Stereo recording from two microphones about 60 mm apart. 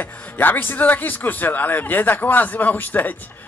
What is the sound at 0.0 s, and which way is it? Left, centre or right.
Speech, left.